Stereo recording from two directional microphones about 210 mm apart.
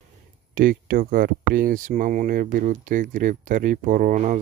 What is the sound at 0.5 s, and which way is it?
Speech, 40° right (ahead or behind).